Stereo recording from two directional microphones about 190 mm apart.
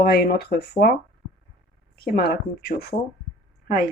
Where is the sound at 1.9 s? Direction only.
55° left (ahead or behind).